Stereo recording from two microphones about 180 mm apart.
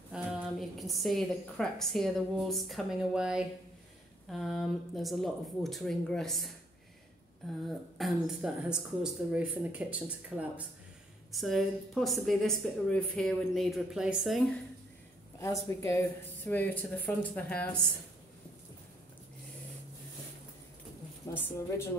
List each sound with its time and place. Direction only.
0.1 s a woman's voice: centre (ahead or behind)
8.0 s a woman's voice: centre (ahead or behind)
15.3 s speech: 15° left (ahead or behind)
21.3 s speech: 15° left (ahead or behind)